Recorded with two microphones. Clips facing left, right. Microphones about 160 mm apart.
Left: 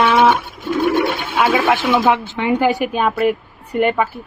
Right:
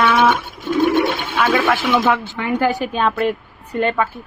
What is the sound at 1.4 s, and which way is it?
A woman's voice, 10° left (ahead or behind).